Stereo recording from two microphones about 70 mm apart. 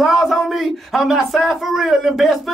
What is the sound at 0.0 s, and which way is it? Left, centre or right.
Speech, centre.